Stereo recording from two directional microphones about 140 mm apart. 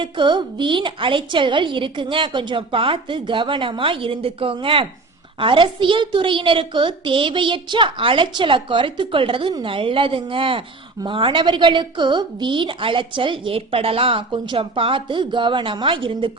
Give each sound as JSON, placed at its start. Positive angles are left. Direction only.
{"t": 0.0, "sound": "a woman's voice", "side_deg": -35}